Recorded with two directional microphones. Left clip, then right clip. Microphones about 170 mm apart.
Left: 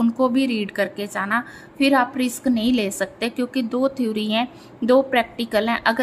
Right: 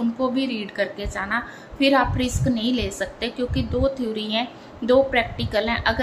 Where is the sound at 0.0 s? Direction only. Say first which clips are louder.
Left 4 dB; 40° left (ahead or behind).